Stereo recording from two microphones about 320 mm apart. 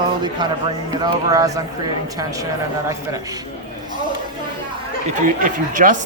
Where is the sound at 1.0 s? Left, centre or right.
Centre.